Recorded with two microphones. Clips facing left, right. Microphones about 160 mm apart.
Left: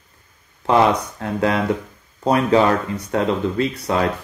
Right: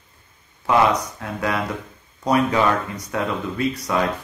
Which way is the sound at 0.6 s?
30° left (ahead or behind).